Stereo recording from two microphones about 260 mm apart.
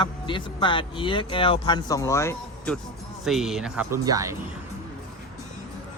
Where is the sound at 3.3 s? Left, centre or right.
Centre.